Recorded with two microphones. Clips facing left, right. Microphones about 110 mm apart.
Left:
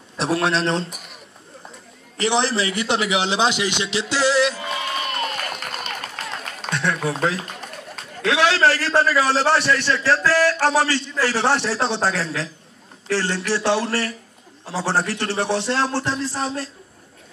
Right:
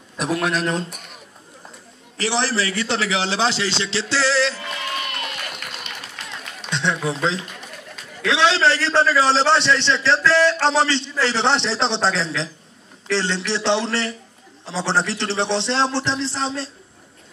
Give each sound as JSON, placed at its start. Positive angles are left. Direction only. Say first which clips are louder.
{"t": 0.2, "sound": "speech", "louder": "left 1 dB", "side_deg": 30}
{"t": 2.1, "sound": "a man's voice", "louder": "left 2 dB", "side_deg": 20}
{"t": 4.6, "sound": "run", "louder": "left 2 dB", "side_deg": 25}
{"t": 6.7, "sound": "a sound", "louder": "even", "side_deg": -25}
{"t": 7.3, "sound": "pigeon", "louder": "left 1 dB", "side_deg": 45}
{"t": 8.3, "sound": "a man's voice", "louder": "even", "side_deg": -30}
{"t": 14.7, "sound": "a man's voice", "louder": "even", "side_deg": -25}